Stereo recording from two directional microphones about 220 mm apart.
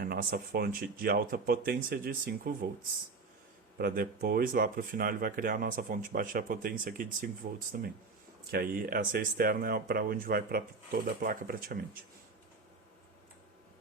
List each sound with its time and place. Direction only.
0.0 s speech: 45° right (ahead or behind)
3.8 s speech: 45° right (ahead or behind)